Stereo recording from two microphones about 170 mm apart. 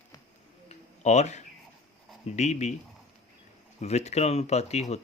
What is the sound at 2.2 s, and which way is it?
Speech, 40° left (ahead or behind).